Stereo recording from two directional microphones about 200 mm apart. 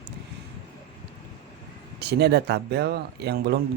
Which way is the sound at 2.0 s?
55° right (ahead or behind).